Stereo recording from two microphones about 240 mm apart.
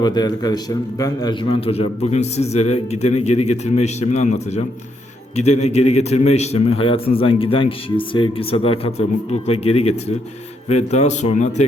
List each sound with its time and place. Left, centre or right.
0.0 s a man's voice: centre
5.6 s a man's voice: left